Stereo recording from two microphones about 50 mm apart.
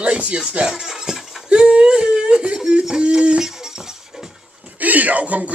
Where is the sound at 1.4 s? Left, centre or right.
Right.